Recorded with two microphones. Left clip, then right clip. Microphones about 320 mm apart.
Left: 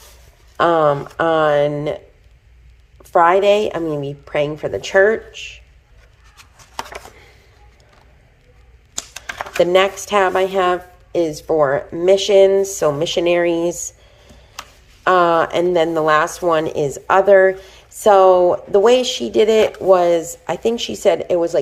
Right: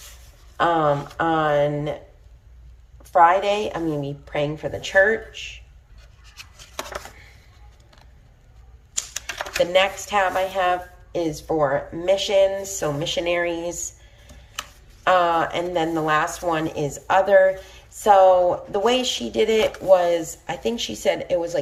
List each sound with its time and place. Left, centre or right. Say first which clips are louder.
0.5 s speech: left 5 dB; centre
3.0 s speech: left 3 dB; centre
9.7 s speech: left 4 dB; centre
15.0 s speech: left 5 dB; centre